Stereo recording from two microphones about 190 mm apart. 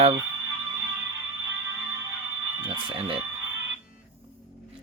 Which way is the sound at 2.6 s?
25° right (ahead or behind).